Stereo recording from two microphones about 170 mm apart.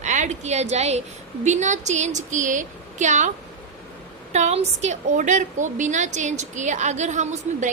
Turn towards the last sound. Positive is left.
turn(degrees=-45)  # may be behind; listen again after turning